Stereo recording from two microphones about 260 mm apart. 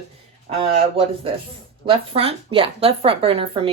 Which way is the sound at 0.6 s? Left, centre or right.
Right.